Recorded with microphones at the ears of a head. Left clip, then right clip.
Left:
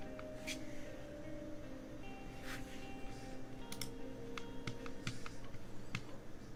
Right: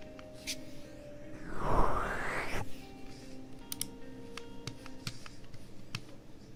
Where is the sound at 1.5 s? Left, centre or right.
Right.